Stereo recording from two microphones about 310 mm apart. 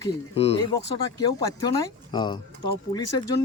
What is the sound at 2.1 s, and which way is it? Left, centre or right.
Speech, centre.